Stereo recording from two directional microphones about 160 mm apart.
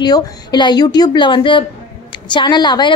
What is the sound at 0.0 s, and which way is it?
A woman's voice, 25° left (ahead or behind).